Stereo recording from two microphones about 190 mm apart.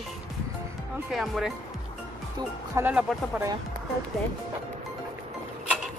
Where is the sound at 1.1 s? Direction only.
Centre (ahead or behind).